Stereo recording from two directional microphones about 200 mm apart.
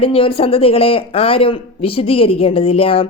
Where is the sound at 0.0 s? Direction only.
30° left (ahead or behind).